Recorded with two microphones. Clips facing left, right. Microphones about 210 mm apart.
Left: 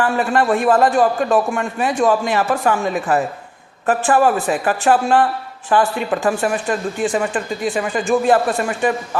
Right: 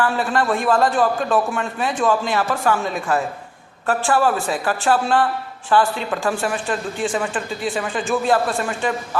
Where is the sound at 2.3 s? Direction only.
20° left (ahead or behind).